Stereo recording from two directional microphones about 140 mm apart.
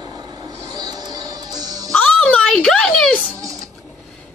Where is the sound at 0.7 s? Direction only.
30° right (ahead or behind).